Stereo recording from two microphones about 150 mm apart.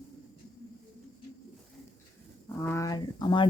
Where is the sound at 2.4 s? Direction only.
15° left (ahead or behind).